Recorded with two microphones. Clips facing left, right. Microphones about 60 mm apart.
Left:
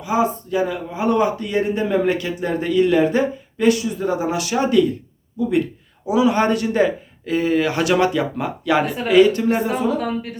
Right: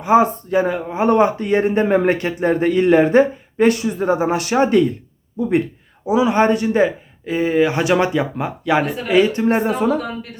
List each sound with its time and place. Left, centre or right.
0.0 s speech: right
6.1 s speech: right
9.6 s speech: right